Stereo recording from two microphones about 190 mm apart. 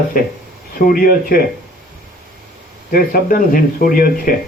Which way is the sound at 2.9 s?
50° left (ahead or behind).